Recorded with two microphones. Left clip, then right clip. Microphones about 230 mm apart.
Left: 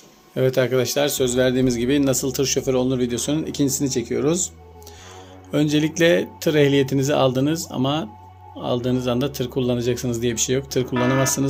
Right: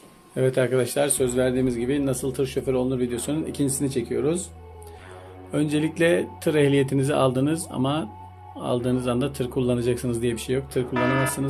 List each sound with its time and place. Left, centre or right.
0.3 s speech: centre
5.5 s speech: centre
10.9 s speech: centre